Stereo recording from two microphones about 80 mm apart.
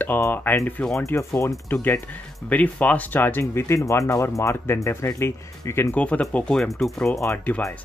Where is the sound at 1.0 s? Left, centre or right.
Left.